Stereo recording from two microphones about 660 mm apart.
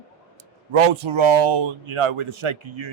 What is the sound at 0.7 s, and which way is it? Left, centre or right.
Speech, right.